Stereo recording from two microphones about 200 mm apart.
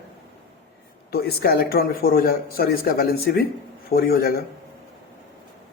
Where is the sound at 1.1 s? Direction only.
50° left (ahead or behind).